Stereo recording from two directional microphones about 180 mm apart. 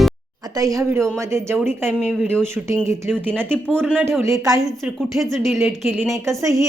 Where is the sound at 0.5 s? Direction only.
20° right (ahead or behind).